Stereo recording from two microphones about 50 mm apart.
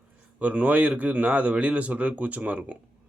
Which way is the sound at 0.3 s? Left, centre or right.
Right.